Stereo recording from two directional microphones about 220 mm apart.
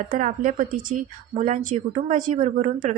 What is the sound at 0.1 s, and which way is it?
Speech, 35° right (ahead or behind).